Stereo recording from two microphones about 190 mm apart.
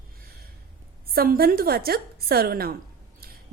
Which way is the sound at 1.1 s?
50° right (ahead or behind).